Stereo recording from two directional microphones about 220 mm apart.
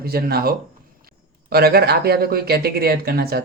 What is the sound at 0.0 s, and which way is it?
Speech, 45° right (ahead or behind).